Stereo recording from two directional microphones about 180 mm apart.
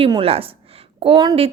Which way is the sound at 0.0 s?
30° right (ahead or behind).